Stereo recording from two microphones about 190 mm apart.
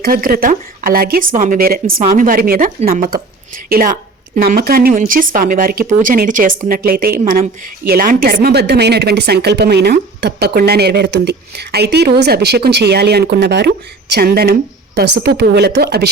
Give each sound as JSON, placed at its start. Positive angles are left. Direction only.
{"t": 0.0, "sound": "speech", "side_deg": -50}